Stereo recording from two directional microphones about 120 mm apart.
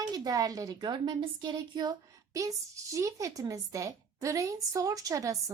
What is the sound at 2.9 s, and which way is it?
Speech, 25° right (ahead or behind).